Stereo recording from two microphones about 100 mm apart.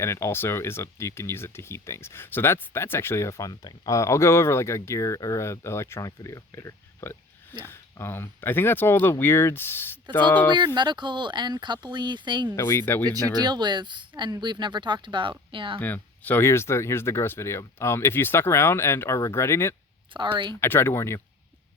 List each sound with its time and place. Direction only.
0.0 s speech: 30° left (ahead or behind)
3.5 s speech: 45° left (ahead or behind); by 10.5 s 20° left (ahead or behind)
10.8 s speech: 50° right (ahead or behind)
12.5 s speech: 25° left (ahead or behind)
13.4 s speech: 45° right (ahead or behind)
15.8 s speech: 20° left (ahead or behind)
20.1 s speech: 50° right (ahead or behind)
20.6 s speech: 25° left (ahead or behind)